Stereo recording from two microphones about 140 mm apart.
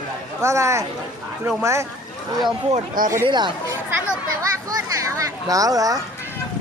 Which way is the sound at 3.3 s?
35° right (ahead or behind).